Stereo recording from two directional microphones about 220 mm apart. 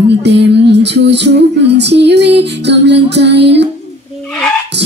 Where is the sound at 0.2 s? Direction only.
50° right (ahead or behind).